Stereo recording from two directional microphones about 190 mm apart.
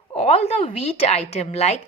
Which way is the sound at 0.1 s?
30° left (ahead or behind).